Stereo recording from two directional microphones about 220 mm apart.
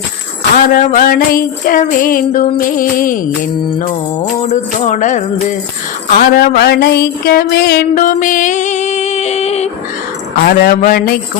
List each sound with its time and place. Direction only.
0.5 s jingle bell: 35° left (ahead or behind)
4.4 s jingle bell: 30° left (ahead or behind)
6.1 s music: 40° left (ahead or behind)
10.3 s jingle bell: 40° left (ahead or behind)